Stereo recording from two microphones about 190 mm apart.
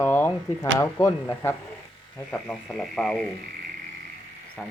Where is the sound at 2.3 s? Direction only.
5° left (ahead or behind).